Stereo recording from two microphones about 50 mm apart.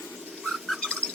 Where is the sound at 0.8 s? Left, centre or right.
Centre.